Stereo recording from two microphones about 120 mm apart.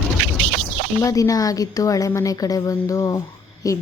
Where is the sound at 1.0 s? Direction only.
30° left (ahead or behind).